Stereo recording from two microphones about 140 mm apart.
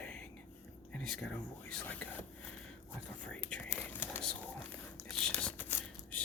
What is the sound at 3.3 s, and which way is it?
Whispering, 5° left (ahead or behind).